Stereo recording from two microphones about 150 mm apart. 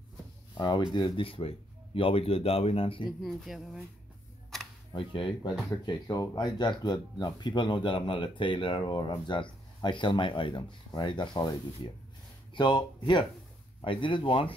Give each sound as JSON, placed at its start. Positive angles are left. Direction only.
{"t": 0.6, "sound": "speech", "side_deg": 30}
{"t": 3.1, "sound": "speech", "side_deg": 0}
{"t": 4.5, "sound": "camera", "side_deg": 0}
{"t": 4.9, "sound": "speech", "side_deg": 35}
{"t": 12.5, "sound": "speech", "side_deg": 30}